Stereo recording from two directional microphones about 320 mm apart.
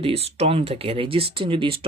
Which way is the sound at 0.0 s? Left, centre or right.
Centre.